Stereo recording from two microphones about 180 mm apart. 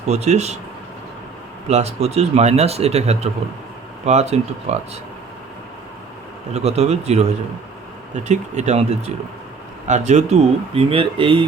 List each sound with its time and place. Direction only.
0.1 s speech: 35° right (ahead or behind)
1.6 s speech: 35° right (ahead or behind)
6.5 s speech: 35° right (ahead or behind)